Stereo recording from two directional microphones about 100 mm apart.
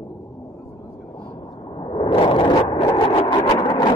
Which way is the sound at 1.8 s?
50° left (ahead or behind).